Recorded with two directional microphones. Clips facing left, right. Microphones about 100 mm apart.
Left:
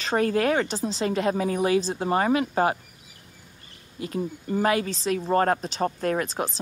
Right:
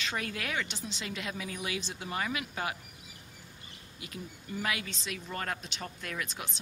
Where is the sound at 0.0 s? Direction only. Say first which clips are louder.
Left 14 dB; 40° left (ahead or behind).